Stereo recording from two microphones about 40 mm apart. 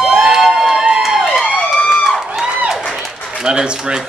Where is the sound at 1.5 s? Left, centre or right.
Left.